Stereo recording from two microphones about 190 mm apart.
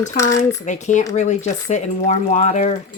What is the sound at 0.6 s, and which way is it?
Speech, 40° left (ahead or behind).